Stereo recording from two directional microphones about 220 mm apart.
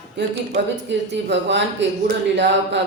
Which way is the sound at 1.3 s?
55° right (ahead or behind).